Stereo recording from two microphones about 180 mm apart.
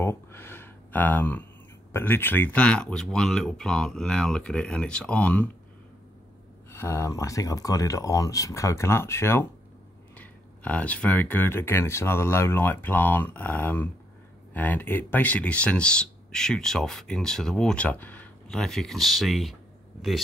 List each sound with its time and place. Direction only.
0.0 s a sound: 15° left (ahead or behind)
1.9 s speech: 10° left (ahead or behind)
6.7 s speech: 15° left (ahead or behind)